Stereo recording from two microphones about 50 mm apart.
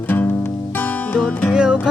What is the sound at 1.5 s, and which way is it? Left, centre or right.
Music, centre.